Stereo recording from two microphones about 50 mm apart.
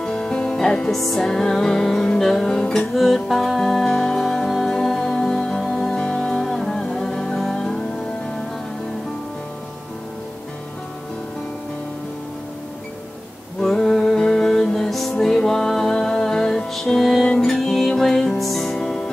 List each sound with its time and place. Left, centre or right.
0.0 s music: centre
0.9 s music: centre
2.9 s music: centre
13.6 s music: centre